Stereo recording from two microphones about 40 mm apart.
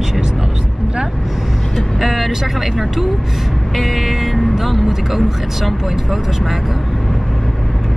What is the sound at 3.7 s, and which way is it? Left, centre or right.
Speech, centre.